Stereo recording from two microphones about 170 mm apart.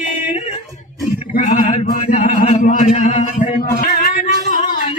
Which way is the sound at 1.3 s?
50° left (ahead or behind).